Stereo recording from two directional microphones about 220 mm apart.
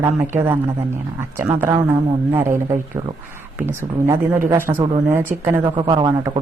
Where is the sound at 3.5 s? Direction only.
10° right (ahead or behind).